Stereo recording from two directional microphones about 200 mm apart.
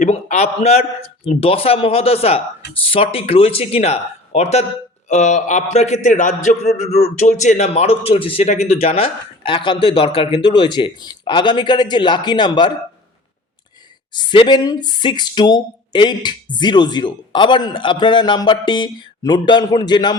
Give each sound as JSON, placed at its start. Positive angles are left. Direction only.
{"t": 0.0, "sound": "a man's voice", "side_deg": 35}
{"t": 14.1, "sound": "a man's voice", "side_deg": 20}